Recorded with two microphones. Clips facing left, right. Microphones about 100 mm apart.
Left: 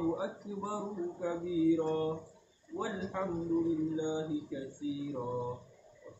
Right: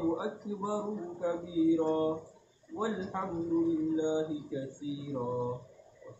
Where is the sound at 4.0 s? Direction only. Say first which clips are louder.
Right 4 dB; 20° right (ahead or behind).